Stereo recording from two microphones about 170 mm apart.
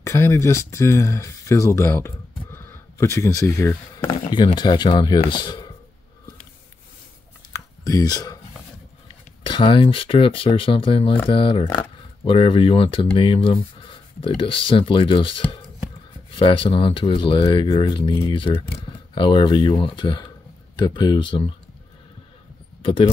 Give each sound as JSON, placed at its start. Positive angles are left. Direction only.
{"t": 0.0, "sound": "speech", "side_deg": 15}
{"t": 4.3, "sound": "speech", "side_deg": 30}
{"t": 7.5, "sound": "a sound", "side_deg": 20}
{"t": 9.4, "sound": "speech", "side_deg": 30}
{"t": 22.8, "sound": "speech", "side_deg": 35}